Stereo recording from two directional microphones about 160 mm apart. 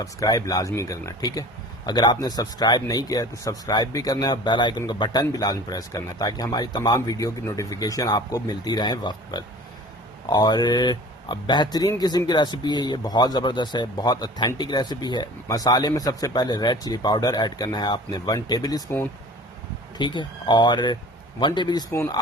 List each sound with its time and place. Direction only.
0.0 s speech: 20° left (ahead or behind)